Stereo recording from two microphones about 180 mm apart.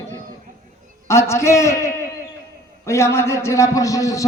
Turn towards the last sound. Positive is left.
turn(degrees=20)  # may be behind; listen again after turning